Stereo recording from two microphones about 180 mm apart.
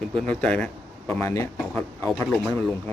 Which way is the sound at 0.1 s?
5° left (ahead or behind).